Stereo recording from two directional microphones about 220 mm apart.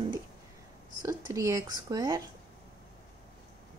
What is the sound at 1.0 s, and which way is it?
Speech, 15° right (ahead or behind).